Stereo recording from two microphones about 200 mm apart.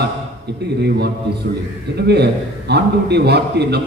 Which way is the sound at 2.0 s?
55° right (ahead or behind).